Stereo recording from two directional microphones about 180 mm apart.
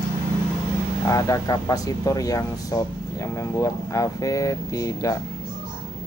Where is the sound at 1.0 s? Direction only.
15° left (ahead or behind).